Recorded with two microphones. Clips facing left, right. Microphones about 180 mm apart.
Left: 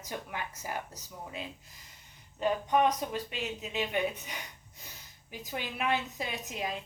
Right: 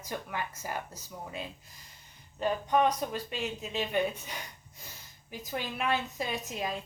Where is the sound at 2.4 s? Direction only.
15° left (ahead or behind).